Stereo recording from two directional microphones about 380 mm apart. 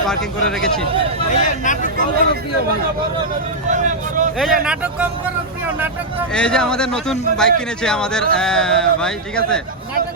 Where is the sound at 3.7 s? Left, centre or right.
Centre.